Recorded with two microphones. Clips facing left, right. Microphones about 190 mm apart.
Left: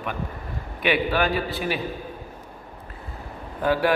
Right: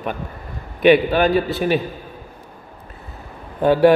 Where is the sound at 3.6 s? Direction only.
25° right (ahead or behind).